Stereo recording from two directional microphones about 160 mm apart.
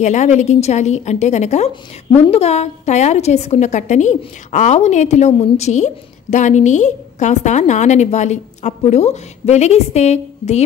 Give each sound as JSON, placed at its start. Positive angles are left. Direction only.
{"t": 0.0, "sound": "a woman's voice", "side_deg": 45}